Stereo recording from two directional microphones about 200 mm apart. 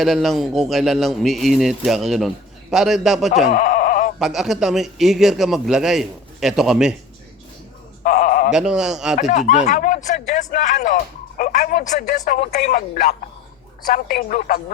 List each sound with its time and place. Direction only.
0.0 s a man's voice: centre (ahead or behind)
3.4 s a sound: 40° left (ahead or behind)
4.2 s a man's voice: centre (ahead or behind)
8.0 s a sound: 40° left (ahead or behind)
8.5 s a man's voice: 5° right (ahead or behind)
9.1 s a woman's voice: 40° left (ahead or behind)